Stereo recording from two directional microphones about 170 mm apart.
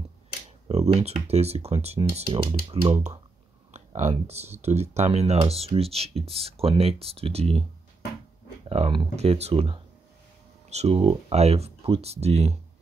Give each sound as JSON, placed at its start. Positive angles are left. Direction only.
{"t": 0.7, "sound": "speech", "side_deg": -40}
{"t": 3.7, "sound": "speech", "side_deg": -40}
{"t": 8.6, "sound": "speech", "side_deg": -35}